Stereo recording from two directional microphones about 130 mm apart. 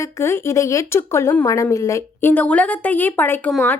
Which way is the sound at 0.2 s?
20° left (ahead or behind).